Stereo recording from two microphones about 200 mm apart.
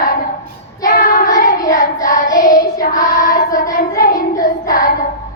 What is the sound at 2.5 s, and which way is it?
Child singing, 40° left (ahead or behind).